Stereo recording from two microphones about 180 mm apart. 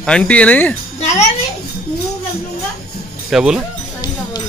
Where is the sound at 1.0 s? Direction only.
40° left (ahead or behind).